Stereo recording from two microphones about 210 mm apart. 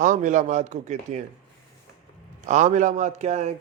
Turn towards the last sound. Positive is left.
turn(degrees=-35)  # may be behind; listen again after turning